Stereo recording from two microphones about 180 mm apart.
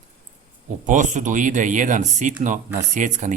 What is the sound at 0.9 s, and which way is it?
Speech, 45° right (ahead or behind).